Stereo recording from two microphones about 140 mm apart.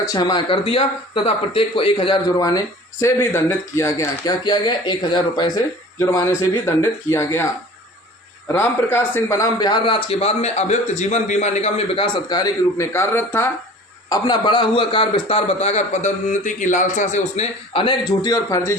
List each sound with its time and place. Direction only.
0.1 s a man's voice: 30° left (ahead or behind)
3.0 s speech: 20° left (ahead or behind)
8.4 s a man's voice: 15° left (ahead or behind)
14.1 s a man's voice: 30° left (ahead or behind); by 17.5 s 55° left (ahead or behind)
17.7 s speech: 30° left (ahead or behind)